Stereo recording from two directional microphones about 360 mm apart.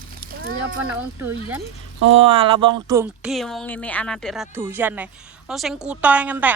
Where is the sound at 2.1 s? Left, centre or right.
Centre.